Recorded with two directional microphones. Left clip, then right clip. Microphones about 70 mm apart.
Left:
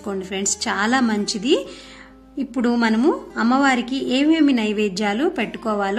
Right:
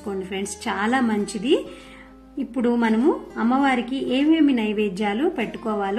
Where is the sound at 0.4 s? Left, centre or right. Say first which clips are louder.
Left 5 dB; left.